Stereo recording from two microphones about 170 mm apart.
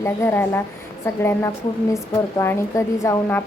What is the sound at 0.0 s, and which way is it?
A woman's voice, 15° left (ahead or behind).